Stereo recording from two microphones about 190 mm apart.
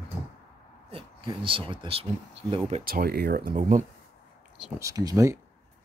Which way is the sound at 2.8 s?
50° right (ahead or behind).